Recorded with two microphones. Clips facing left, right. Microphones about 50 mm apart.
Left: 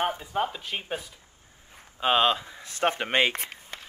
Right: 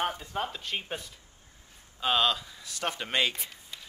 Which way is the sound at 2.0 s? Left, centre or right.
Left.